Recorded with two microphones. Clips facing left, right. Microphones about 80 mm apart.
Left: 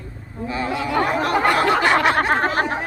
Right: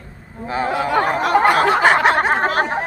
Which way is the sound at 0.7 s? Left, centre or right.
Right.